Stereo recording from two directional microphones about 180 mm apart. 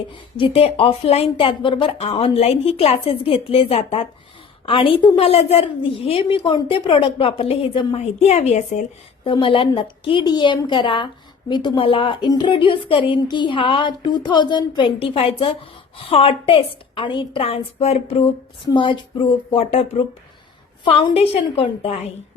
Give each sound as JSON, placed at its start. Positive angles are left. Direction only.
{"t": 0.1, "sound": "a woman's voice", "side_deg": 30}
{"t": 9.2, "sound": "a woman's voice", "side_deg": 30}